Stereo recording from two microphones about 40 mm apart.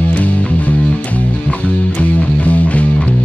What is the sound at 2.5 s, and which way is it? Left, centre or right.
Music, left.